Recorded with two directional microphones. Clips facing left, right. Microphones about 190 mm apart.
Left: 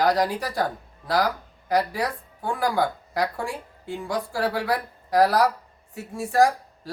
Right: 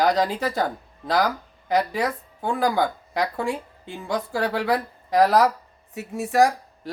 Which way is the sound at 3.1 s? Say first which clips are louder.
Right 2 dB; 20° right (ahead or behind).